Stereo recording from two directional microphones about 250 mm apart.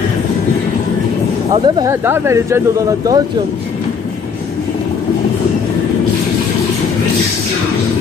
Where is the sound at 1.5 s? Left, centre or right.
Centre.